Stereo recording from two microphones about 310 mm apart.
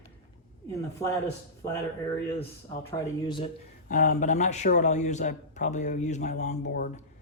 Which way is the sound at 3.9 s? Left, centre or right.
Left.